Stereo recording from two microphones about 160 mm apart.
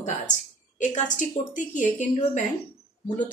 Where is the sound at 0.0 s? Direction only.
50° left (ahead or behind).